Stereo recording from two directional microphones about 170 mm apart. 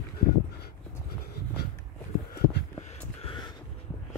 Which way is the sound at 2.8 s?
40° left (ahead or behind).